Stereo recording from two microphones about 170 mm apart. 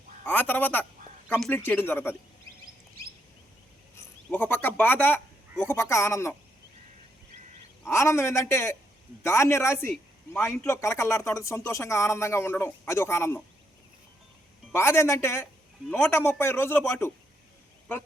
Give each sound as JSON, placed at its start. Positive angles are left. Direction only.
{"t": 0.3, "sound": "speech", "side_deg": 10}
{"t": 3.9, "sound": "speech", "side_deg": 10}
{"t": 7.9, "sound": "speech", "side_deg": 15}
{"t": 14.7, "sound": "speech", "side_deg": 15}